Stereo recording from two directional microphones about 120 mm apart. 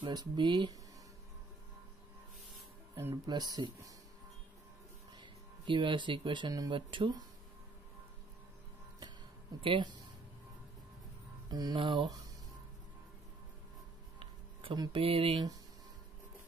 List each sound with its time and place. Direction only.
0.0 s speech: 40° right (ahead or behind)
3.3 s speech: 35° right (ahead or behind)
5.1 s speech: 40° right (ahead or behind)
9.6 s speech: 45° right (ahead or behind)
11.5 s speech: 35° right (ahead or behind)
14.2 s speech: 45° right (ahead or behind)